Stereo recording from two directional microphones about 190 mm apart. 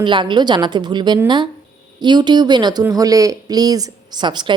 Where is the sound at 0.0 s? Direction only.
25° right (ahead or behind).